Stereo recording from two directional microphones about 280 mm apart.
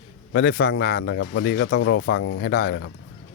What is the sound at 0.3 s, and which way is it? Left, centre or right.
Speech, left.